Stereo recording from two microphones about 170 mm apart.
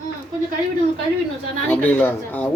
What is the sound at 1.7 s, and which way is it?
Speech, 10° left (ahead or behind).